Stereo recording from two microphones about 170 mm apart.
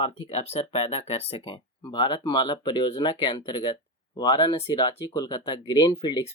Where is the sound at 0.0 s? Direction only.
35° left (ahead or behind).